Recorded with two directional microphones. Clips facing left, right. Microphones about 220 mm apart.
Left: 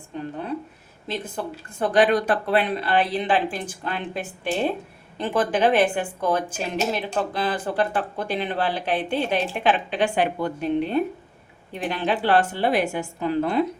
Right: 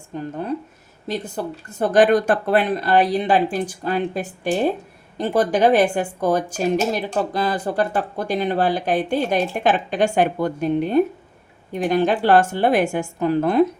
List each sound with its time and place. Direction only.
0.1 s speech: 40° right (ahead or behind)
1.4 s speech: 40° right (ahead or behind)